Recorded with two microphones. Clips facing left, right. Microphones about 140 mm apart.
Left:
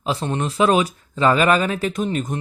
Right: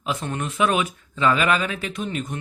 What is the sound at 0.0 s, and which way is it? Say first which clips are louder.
Speech: left 4 dB; 30° left (ahead or behind).